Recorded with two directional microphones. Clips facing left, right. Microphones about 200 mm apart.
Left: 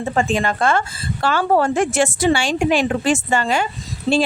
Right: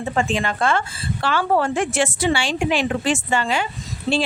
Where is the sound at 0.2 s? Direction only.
40° left (ahead or behind).